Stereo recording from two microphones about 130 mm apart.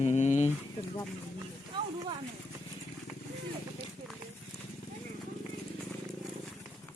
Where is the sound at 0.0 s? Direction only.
60° left (ahead or behind).